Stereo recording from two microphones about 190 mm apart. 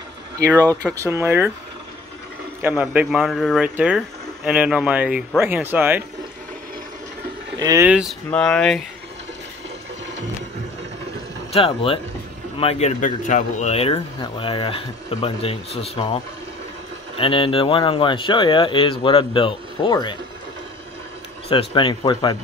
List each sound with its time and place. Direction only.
0.5 s speech: 10° left (ahead or behind)
0.9 s speech: 15° right (ahead or behind)
2.7 s speech: 5° right (ahead or behind)
7.5 s speech: 20° right (ahead or behind)
7.8 s speech: 5° right (ahead or behind)
11.5 s speech: 30° left (ahead or behind)
17.2 s speech: 30° left (ahead or behind)
21.5 s speech: 30° left (ahead or behind)